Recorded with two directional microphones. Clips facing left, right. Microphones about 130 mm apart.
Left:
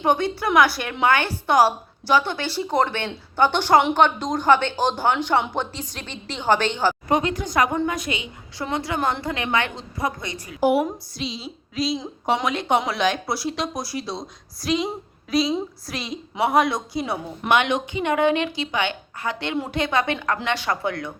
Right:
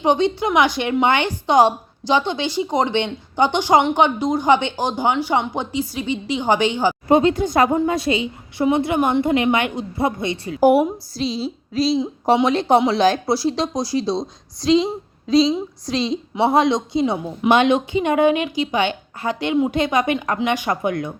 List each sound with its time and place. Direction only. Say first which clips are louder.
0.0 s a woman's voice: right 4 dB; 20° right (ahead or behind)
7.1 s a woman's voice: right 7 dB; 25° right (ahead or behind)